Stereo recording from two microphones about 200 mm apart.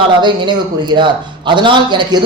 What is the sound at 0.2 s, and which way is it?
A man's voice, 25° right (ahead or behind).